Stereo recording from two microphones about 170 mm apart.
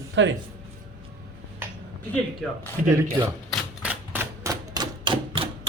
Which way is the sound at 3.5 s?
10° right (ahead or behind).